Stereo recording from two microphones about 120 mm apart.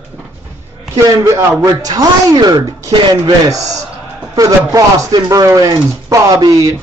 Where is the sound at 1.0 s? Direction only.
30° right (ahead or behind).